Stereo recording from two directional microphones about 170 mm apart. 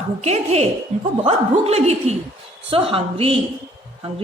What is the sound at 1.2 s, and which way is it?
A woman's voice, 35° right (ahead or behind).